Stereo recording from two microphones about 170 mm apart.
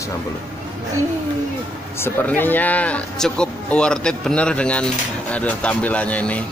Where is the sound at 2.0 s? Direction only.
10° left (ahead or behind).